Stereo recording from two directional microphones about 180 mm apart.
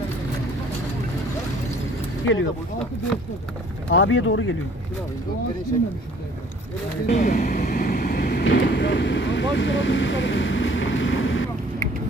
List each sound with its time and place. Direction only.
2.2 s speech: 90° left
3.8 s speech: 90° left
7.1 s vehicle: 45° left (ahead or behind); by 11.4 s 90° left